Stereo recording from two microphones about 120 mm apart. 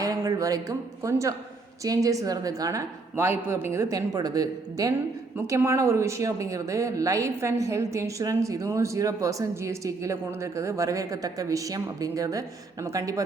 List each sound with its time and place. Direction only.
0.0 s speech: 30° right (ahead or behind)